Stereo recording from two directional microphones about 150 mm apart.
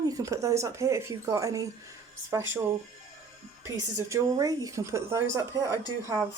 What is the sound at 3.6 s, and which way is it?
A woman's voice, 20° right (ahead or behind).